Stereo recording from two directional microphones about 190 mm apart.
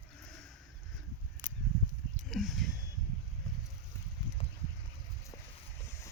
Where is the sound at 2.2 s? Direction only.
Centre (ahead or behind).